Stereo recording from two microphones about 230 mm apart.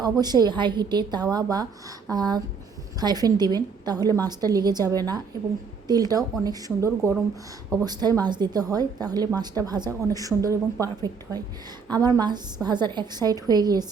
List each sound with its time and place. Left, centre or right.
0.0 s a woman's voice: centre